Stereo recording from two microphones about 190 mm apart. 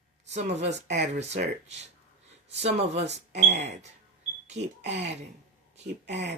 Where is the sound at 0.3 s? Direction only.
35° right (ahead or behind).